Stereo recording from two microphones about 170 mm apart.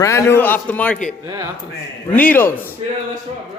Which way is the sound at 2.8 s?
35° right (ahead or behind).